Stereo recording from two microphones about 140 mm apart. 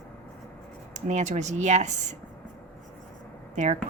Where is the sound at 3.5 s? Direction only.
60° right (ahead or behind).